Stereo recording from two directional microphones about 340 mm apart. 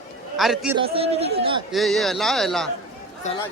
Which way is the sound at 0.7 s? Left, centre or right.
Centre.